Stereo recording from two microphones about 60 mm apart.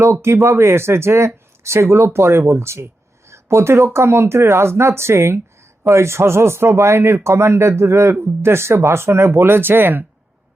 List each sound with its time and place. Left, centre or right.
0.0 s speech: right